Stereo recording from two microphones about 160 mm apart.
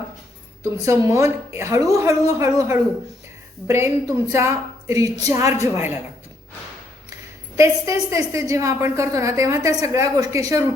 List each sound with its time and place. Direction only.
0.6 s a woman's voice: 20° right (ahead or behind)
7.5 s a woman's voice: 20° right (ahead or behind)